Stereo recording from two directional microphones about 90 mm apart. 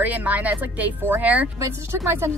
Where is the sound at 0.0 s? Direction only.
20° right (ahead or behind).